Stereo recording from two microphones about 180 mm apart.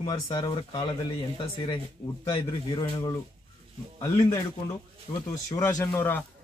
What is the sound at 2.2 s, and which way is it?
Speech, 30° left (ahead or behind).